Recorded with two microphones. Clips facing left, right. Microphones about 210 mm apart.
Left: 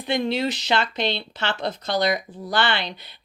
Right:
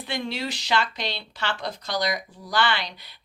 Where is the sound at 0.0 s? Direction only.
20° left (ahead or behind).